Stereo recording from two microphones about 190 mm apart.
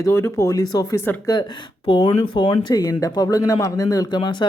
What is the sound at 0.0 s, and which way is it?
Speech, 15° left (ahead or behind).